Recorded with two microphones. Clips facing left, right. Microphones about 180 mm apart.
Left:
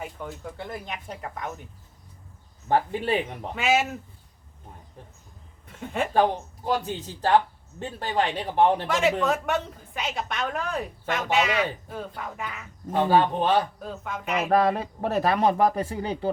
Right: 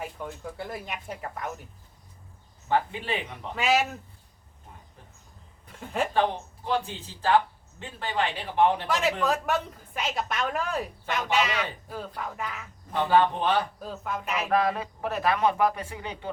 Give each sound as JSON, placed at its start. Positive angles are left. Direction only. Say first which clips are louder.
{"t": 0.0, "sound": "a woman's voice", "louder": "even", "side_deg": 0}
{"t": 2.6, "sound": "speech", "louder": "left 3 dB", "side_deg": 45}
{"t": 3.5, "sound": "a woman's voice", "louder": "left 1 dB", "side_deg": 0}
{"t": 5.6, "sound": "speech", "louder": "left 1 dB", "side_deg": 0}
{"t": 6.7, "sound": "a man's voice", "louder": "left 2 dB", "side_deg": 40}
{"t": 8.9, "sound": "a woman's voice", "louder": "left 3 dB", "side_deg": 0}
{"t": 13.0, "sound": "a man's voice", "louder": "left 2 dB", "side_deg": 35}
{"t": 13.7, "sound": "a woman's voice", "louder": "even", "side_deg": 0}
{"t": 14.3, "sound": "a man's voice", "louder": "left 4 dB", "side_deg": 50}